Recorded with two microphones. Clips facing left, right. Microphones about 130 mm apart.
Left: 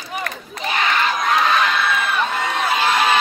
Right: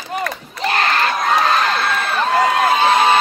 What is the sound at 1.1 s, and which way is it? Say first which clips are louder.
Crowd: right 1 dB; 35° right (ahead or behind).